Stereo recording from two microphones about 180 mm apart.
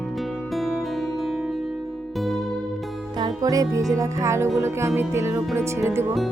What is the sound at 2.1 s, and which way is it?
Music, centre (ahead or behind).